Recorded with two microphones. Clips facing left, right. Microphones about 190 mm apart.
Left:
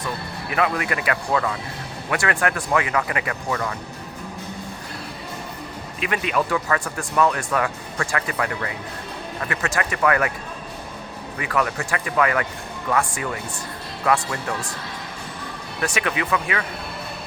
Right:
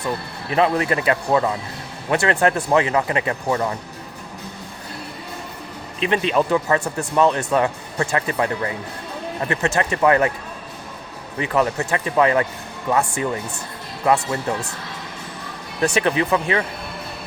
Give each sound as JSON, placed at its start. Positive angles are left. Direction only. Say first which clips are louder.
{"t": 0.5, "sound": "speech", "louder": "right 5 dB", "side_deg": -30}
{"t": 6.0, "sound": "speech", "louder": "right 4 dB", "side_deg": -25}
{"t": 11.3, "sound": "speech", "louder": "right 4 dB", "side_deg": -25}
{"t": 16.0, "sound": "speech", "louder": "right 4 dB", "side_deg": -30}